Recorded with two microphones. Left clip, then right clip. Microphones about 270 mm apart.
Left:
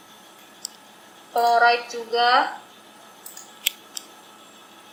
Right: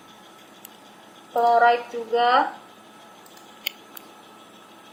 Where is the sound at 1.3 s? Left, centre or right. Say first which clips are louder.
Even; right.